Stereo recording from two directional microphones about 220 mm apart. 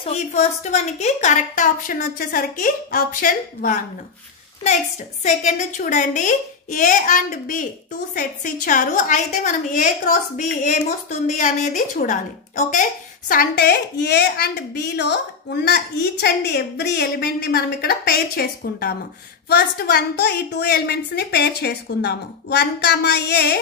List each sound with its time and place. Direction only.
0.0 s a woman's voice: 30° left (ahead or behind)
5.2 s a woman's voice: 35° left (ahead or behind); by 23.6 s 50° left (ahead or behind)